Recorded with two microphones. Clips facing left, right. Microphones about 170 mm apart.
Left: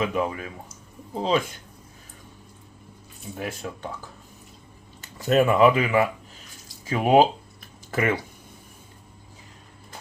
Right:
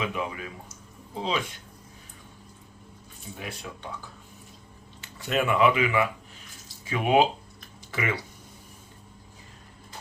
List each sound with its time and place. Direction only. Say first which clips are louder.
0.0 s speech: left 6 dB; 45° left (ahead or behind)
3.3 s speech: left 7 dB; 40° left (ahead or behind)
4.9 s speech: left 7 dB; 40° left (ahead or behind)
7.9 s speech: left 6 dB; 50° left (ahead or behind)